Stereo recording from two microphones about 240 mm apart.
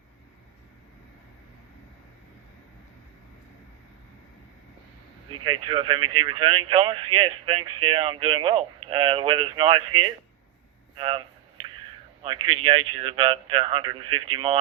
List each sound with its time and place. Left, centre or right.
5.5 s speech: right
12.2 s speech: right